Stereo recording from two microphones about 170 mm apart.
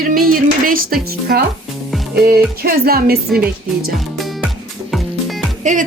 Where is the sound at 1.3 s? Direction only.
65° right (ahead or behind).